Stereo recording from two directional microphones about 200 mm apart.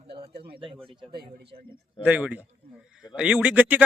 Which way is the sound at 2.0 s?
5° right (ahead or behind).